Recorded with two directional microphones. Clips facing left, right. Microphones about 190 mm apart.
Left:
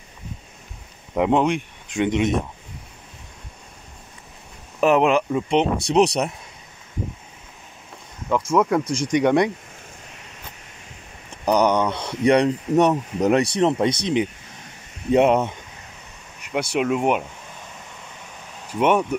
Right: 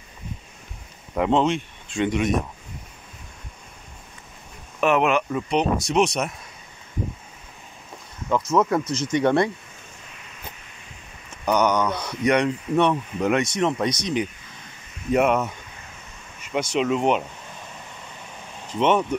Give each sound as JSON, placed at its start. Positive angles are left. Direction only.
{"t": 1.1, "sound": "speech", "side_deg": 15}
{"t": 4.7, "sound": "speech", "side_deg": 30}
{"t": 8.3, "sound": "speech", "side_deg": 10}
{"t": 11.4, "sound": "speech", "side_deg": 30}
{"t": 16.5, "sound": "speech", "side_deg": 10}
{"t": 18.7, "sound": "speech", "side_deg": 10}